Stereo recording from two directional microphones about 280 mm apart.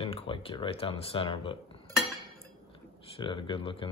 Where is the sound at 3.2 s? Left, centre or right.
Centre.